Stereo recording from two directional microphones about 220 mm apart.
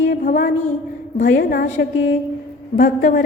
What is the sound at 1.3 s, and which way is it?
Music, 45° left (ahead or behind).